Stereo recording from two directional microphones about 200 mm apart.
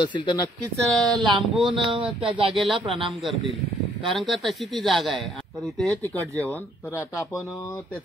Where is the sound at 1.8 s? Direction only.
25° right (ahead or behind).